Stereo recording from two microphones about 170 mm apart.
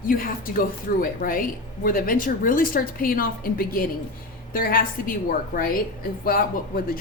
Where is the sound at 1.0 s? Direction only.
55° left (ahead or behind).